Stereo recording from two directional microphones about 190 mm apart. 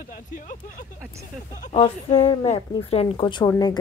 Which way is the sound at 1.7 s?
35° left (ahead or behind).